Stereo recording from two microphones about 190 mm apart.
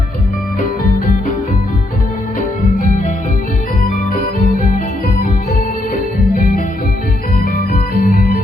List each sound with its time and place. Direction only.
0.6 s music: 45° left (ahead or behind)
3.8 s organ: 45° left (ahead or behind)
7.3 s music: 55° left (ahead or behind)